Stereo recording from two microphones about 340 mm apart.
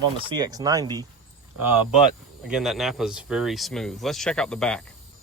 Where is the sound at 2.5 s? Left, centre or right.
Centre.